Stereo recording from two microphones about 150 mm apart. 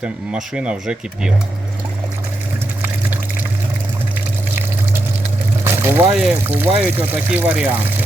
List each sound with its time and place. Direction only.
0.0 s speech: 5° right (ahead or behind)
5.6 s vehicle: 15° right (ahead or behind)
6.4 s speech: 15° right (ahead or behind)